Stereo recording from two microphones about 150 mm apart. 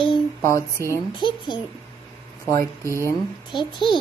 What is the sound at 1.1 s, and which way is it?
Speech, 30° left (ahead or behind).